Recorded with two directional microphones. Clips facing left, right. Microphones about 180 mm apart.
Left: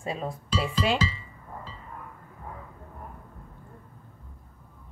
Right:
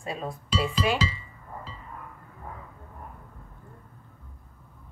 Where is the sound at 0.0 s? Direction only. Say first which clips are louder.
Left 1 dB; 25° left (ahead or behind).